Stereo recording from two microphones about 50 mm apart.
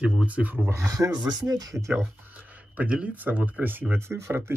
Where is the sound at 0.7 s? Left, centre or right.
Right.